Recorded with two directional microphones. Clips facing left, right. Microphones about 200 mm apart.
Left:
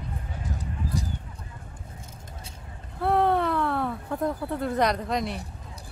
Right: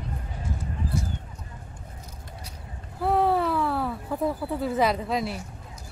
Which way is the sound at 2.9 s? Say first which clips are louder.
Even; 5° right (ahead or behind).